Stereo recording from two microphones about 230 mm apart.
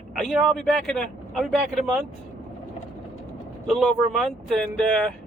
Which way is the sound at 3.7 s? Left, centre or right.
Centre.